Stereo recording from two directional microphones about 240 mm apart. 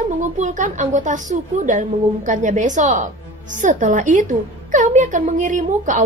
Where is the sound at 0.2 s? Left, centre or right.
Right.